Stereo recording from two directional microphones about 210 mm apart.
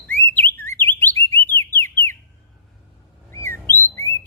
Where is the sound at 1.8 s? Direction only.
10° left (ahead or behind).